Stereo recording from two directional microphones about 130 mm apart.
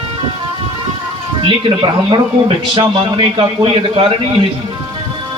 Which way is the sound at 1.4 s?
40° right (ahead or behind).